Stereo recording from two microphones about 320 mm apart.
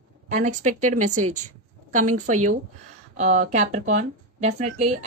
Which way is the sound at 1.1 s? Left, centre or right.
Right.